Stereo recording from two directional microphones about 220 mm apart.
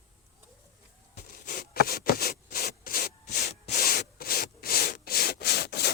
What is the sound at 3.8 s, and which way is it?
Rub, 45° left (ahead or behind).